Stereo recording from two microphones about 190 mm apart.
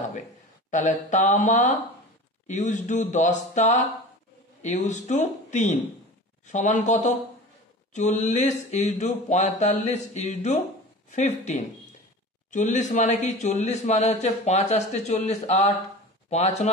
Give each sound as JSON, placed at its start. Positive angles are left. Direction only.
{"t": 0.7, "sound": "a man's voice", "side_deg": 40}